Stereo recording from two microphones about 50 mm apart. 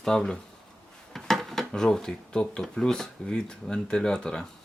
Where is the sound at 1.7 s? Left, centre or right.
Centre.